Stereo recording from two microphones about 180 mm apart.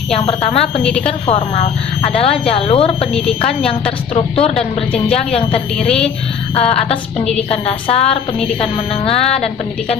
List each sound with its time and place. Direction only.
0.1 s speech: 35° left (ahead or behind)
0.8 s a woman's voice: 5° left (ahead or behind)
1.0 s speech: 40° left (ahead or behind)
3.1 s a woman's voice: 5° left (ahead or behind)
4.1 s speech: 35° left (ahead or behind)
5.7 s a woman's voice: 5° left (ahead or behind)
6.5 s speech: 35° left (ahead or behind)